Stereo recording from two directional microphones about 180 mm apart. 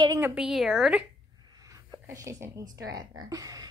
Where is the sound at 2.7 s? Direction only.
20° right (ahead or behind).